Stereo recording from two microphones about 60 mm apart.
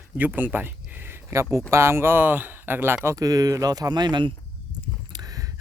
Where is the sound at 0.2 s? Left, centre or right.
Right.